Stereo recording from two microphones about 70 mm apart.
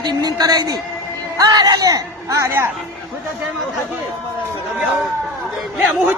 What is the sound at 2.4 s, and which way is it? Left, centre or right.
Speech, right.